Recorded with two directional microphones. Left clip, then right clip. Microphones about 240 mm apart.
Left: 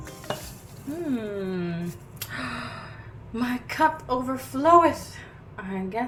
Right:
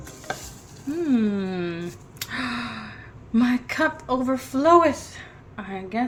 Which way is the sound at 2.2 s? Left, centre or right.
Right.